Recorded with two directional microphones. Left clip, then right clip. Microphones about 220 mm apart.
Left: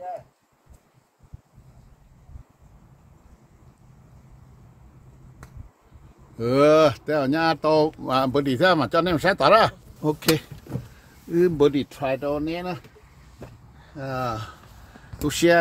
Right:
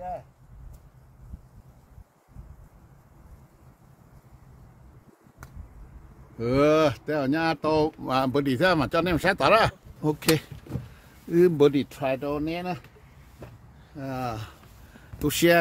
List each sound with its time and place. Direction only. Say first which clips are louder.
6.3 s speech: left 4 dB; 15° left (ahead or behind); by 10.2 s centre (ahead or behind)
11.3 s speech: even; 30° right (ahead or behind)
13.9 s speech: left 4 dB; 15° right (ahead or behind)